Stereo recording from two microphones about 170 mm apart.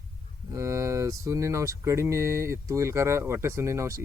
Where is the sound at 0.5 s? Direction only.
15° right (ahead or behind).